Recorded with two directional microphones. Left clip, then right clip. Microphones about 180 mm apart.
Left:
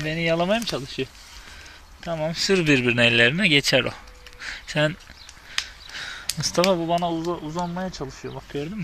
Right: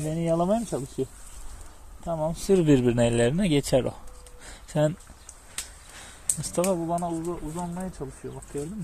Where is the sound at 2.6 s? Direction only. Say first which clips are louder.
Left 4 dB; 30° right (ahead or behind).